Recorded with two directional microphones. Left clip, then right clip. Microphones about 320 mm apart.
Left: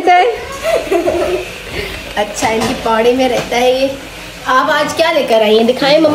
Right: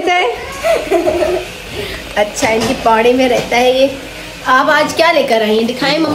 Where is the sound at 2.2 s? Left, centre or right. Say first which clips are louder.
Right 1 dB; centre.